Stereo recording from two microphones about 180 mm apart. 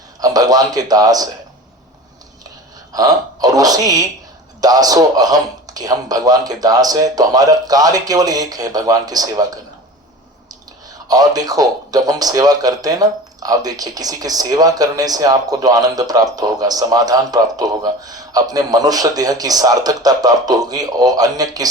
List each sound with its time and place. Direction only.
0.2 s a man's voice: 20° right (ahead or behind)
2.9 s a man's voice: 20° right (ahead or behind)
10.8 s a man's voice: 20° right (ahead or behind)